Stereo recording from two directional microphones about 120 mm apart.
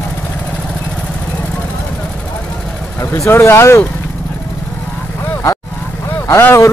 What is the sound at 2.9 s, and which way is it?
Speech, 25° left (ahead or behind).